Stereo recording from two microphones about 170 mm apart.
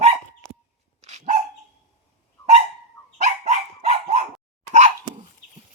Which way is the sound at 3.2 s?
40° right (ahead or behind).